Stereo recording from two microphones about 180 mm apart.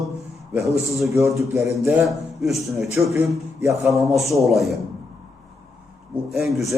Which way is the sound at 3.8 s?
Centre (ahead or behind).